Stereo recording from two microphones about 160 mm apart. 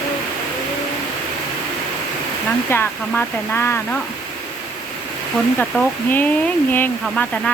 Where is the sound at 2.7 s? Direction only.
15° left (ahead or behind).